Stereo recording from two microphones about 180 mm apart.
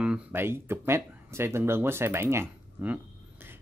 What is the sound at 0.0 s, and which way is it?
Speech, 10° right (ahead or behind).